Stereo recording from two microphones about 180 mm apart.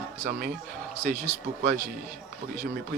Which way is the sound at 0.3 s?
55° right (ahead or behind).